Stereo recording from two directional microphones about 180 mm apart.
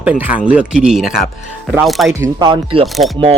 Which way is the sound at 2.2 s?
25° right (ahead or behind).